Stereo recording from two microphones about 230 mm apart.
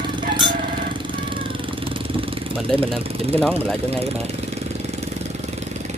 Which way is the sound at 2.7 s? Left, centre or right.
Right.